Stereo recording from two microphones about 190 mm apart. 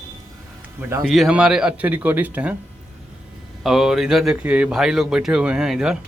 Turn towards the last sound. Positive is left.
turn(degrees=-5)  # may be behind; listen again after turning